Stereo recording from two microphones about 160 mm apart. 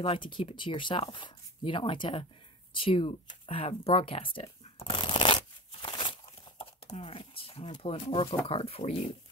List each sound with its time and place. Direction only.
0.0 s speech: 30° left (ahead or behind)
2.7 s a sound: 35° left (ahead or behind)
6.6 s speech: 35° left (ahead or behind)